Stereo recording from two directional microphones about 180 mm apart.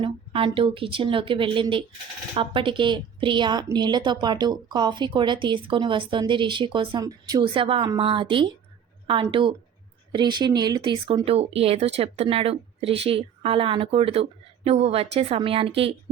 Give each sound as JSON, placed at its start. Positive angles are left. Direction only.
{"t": 0.0, "sound": "a woman's voice", "side_deg": -30}